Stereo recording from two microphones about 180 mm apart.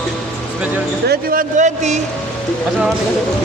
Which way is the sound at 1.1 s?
45° right (ahead or behind).